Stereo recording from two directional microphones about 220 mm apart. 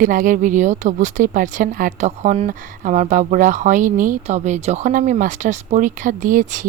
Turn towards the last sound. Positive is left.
turn(degrees=-35)  # may be behind; listen again after turning